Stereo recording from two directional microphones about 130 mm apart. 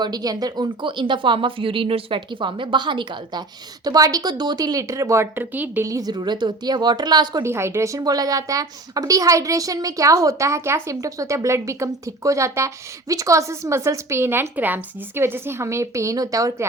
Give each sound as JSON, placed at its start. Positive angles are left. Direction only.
{"t": 0.0, "sound": "a woman's voice", "side_deg": -30}
{"t": 5.8, "sound": "speech", "side_deg": -25}
{"t": 7.4, "sound": "a woman's voice", "side_deg": -20}